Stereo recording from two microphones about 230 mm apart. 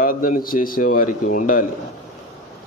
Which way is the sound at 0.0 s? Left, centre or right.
Left.